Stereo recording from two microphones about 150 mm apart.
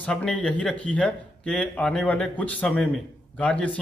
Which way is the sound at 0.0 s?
5° left (ahead or behind).